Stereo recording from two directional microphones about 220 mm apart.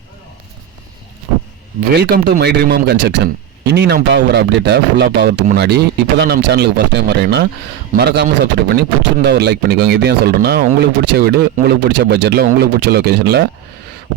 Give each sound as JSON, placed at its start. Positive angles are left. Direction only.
{"t": 1.8, "sound": "speech", "side_deg": -45}